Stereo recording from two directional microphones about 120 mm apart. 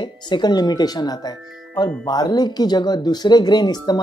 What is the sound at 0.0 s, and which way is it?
Speech, 40° left (ahead or behind).